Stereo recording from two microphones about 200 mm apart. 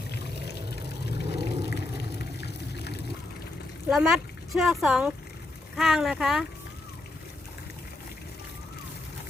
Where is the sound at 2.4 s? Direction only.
55° left (ahead or behind).